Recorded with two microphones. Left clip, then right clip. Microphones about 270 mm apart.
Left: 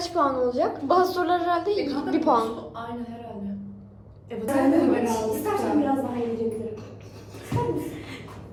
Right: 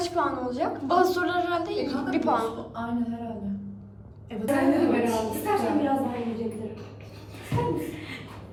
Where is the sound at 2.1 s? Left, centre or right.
Left.